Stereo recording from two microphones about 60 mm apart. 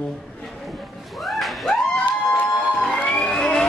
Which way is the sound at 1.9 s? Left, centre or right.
Left.